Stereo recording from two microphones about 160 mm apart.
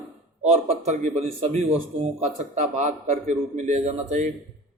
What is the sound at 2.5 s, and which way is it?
A man's voice, 45° right (ahead or behind).